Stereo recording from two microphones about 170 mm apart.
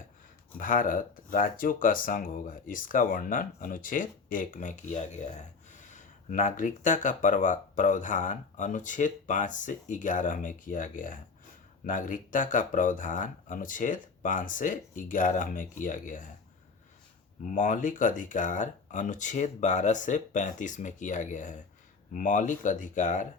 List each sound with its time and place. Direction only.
0.5 s speech: 55° left (ahead or behind)
17.4 s speech: 50° left (ahead or behind)